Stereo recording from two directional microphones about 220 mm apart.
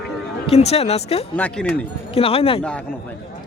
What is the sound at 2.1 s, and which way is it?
Speech, 25° left (ahead or behind).